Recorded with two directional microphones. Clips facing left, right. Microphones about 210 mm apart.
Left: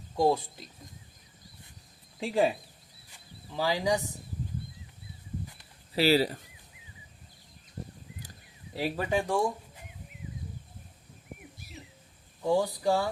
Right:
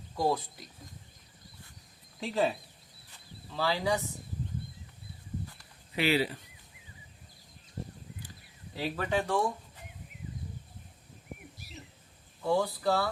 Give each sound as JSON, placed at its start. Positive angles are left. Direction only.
{"t": 0.2, "sound": "speech", "side_deg": 25}
{"t": 2.2, "sound": "speech", "side_deg": 10}
{"t": 3.5, "sound": "speech", "side_deg": 15}
{"t": 6.0, "sound": "speech", "side_deg": 35}
{"t": 9.0, "sound": "speech", "side_deg": 10}
{"t": 12.4, "sound": "speech", "side_deg": 15}